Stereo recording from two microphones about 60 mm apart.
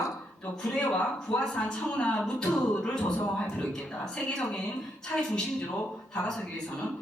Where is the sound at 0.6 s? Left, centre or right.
Centre.